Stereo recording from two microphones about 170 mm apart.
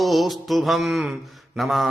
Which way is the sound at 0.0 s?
Centre (ahead or behind).